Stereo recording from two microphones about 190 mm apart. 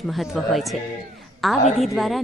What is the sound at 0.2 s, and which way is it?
A woman's voice, centre (ahead or behind).